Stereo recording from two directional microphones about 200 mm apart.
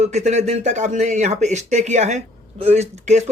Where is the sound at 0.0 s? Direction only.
35° right (ahead or behind).